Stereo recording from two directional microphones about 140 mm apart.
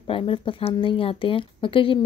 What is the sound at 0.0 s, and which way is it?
Speech, 40° left (ahead or behind).